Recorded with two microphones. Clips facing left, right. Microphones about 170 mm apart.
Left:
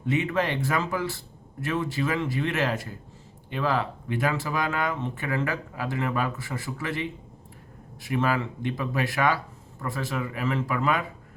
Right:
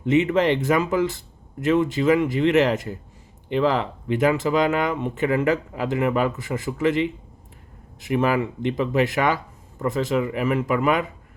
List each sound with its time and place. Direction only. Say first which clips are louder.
0.1 s speech: right 7 dB; 20° right (ahead or behind)